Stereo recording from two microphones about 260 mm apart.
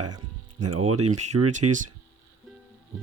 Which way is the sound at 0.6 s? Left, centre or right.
Right.